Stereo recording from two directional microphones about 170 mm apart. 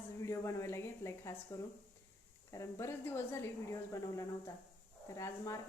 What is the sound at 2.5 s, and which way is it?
Speech, 15° left (ahead or behind).